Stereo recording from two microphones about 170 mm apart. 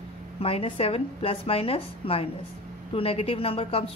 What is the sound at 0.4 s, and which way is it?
Speech, 35° left (ahead or behind).